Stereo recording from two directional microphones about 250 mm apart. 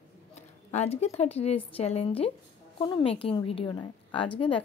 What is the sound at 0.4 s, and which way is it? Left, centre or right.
A woman's voice, left.